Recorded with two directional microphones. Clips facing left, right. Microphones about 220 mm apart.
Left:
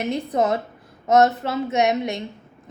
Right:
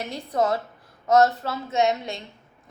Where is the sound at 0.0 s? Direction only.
20° left (ahead or behind).